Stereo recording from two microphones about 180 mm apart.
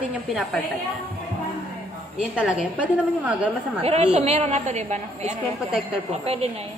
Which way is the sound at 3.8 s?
35° right (ahead or behind).